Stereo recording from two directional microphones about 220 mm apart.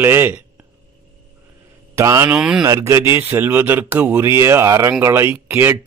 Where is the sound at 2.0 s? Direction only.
15° right (ahead or behind).